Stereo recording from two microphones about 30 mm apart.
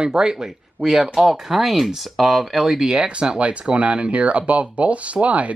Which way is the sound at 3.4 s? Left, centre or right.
Right.